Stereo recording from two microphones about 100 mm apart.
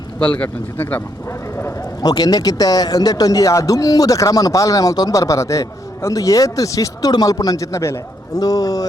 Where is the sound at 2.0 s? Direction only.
40° left (ahead or behind).